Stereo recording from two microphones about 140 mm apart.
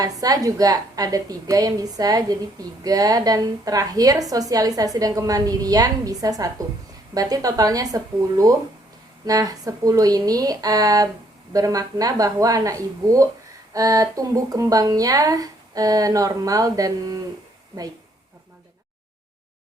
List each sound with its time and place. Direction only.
0.0 s a woman's voice: 25° right (ahead or behind)